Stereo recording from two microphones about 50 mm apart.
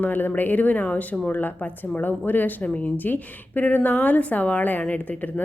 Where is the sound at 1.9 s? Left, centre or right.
Left.